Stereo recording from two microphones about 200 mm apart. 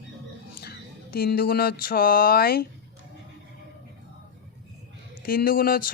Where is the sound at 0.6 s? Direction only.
50° left (ahead or behind).